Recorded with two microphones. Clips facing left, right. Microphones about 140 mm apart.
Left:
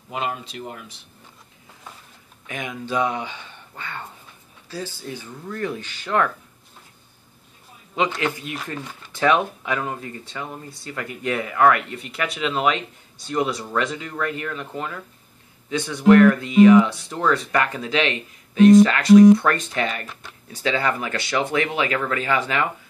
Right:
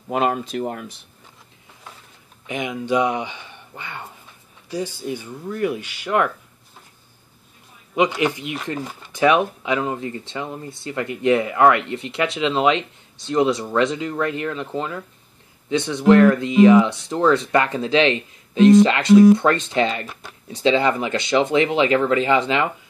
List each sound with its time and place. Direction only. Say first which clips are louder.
0.1 s speech: right 7 dB; 50° right (ahead or behind)
2.4 s speech: right 5 dB; 15° right (ahead or behind)
7.9 s speech: right 4 dB; 15° right (ahead or behind)